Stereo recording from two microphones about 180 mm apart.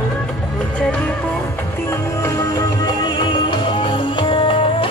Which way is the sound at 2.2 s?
15° left (ahead or behind).